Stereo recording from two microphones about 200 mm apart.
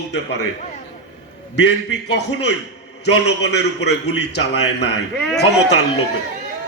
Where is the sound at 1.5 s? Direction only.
60° left (ahead or behind).